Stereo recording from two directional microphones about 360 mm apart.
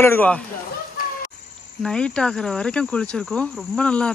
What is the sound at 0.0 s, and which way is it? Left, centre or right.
Speech, centre.